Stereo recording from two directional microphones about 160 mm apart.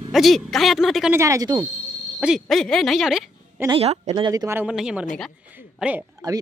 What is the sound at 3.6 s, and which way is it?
Speech, 40° right (ahead or behind).